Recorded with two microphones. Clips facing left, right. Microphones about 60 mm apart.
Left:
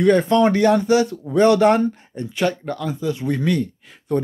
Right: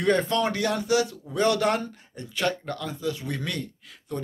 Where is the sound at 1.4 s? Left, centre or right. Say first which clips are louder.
Left 9 dB; left.